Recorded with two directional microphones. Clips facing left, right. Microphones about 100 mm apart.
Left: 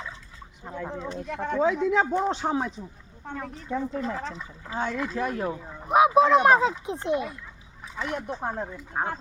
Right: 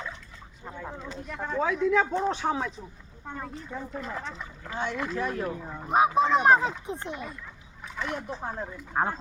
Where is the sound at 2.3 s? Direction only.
30° left (ahead or behind).